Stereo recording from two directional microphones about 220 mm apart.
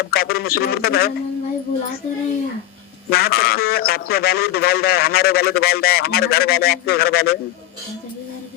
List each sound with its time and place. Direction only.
0.0 s a man's voice: 45° left (ahead or behind)
3.1 s a man's voice: 45° left (ahead or behind)